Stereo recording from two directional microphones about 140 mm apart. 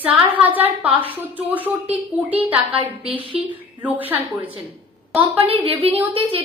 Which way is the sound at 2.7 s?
40° right (ahead or behind).